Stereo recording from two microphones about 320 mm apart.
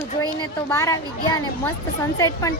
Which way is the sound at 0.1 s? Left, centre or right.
Centre.